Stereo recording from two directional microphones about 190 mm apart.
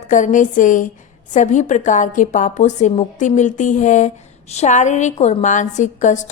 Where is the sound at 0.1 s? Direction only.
40° left (ahead or behind).